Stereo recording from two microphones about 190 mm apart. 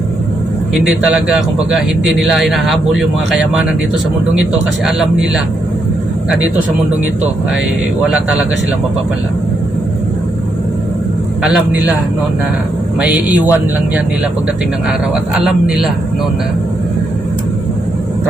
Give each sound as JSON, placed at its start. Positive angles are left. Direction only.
{"t": 0.7, "sound": "a man's voice", "side_deg": -5}
{"t": 4.9, "sound": "a man's voice", "side_deg": -5}
{"t": 8.0, "sound": "a man's voice", "side_deg": -5}
{"t": 11.4, "sound": "a man's voice", "side_deg": -5}
{"t": 13.0, "sound": "a man's voice", "side_deg": -5}